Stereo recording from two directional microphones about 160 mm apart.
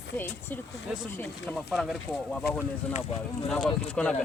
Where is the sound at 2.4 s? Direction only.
85° left.